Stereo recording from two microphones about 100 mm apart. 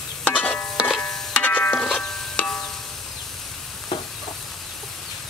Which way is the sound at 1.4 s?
15° left (ahead or behind).